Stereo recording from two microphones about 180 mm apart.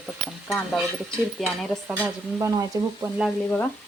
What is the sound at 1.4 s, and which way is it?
Speech, centre (ahead or behind).